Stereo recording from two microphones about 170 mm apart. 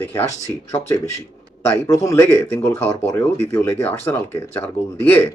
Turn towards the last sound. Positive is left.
turn(degrees=10)  # may be behind; listen again after turning